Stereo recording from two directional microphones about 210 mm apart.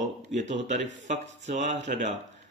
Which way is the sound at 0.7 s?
35° right (ahead or behind).